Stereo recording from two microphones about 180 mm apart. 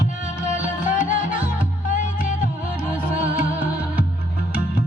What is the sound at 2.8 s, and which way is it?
Music, 10° right (ahead or behind).